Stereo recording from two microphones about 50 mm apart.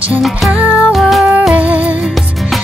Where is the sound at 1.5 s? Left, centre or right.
Right.